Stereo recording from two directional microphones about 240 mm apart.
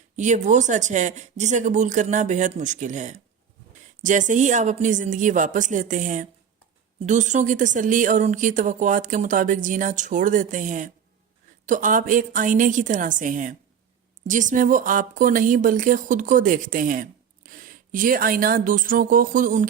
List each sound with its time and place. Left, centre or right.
0.2 s speech: right